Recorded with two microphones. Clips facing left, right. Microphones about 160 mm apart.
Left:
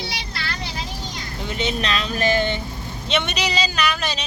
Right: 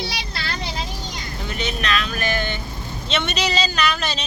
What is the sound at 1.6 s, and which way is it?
Speech, 25° left (ahead or behind).